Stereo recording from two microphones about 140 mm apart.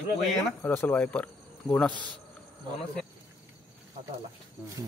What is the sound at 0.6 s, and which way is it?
Speech, 15° left (ahead or behind).